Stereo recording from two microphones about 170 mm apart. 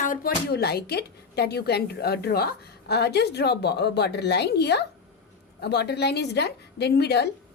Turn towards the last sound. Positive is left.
turn(degrees=75)  # may be behind; listen again after turning